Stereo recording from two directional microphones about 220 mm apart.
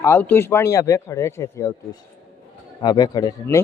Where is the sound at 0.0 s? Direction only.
10° left (ahead or behind).